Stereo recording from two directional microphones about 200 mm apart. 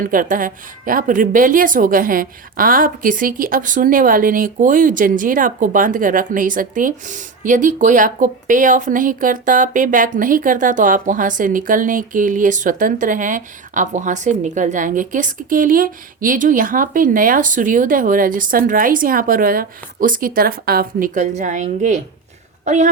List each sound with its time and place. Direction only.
0.0 s a woman's voice: 45° right (ahead or behind)